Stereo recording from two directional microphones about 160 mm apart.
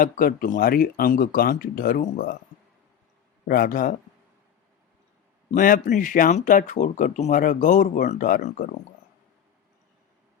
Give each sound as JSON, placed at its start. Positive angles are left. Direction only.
{"t": 0.0, "sound": "speech", "side_deg": 60}
{"t": 3.4, "sound": "speech", "side_deg": 65}
{"t": 5.5, "sound": "speech", "side_deg": 55}